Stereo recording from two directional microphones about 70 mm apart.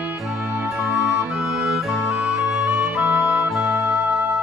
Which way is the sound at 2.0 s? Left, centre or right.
Centre.